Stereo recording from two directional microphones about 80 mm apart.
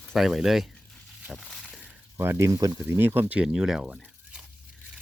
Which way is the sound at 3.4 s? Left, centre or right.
Centre.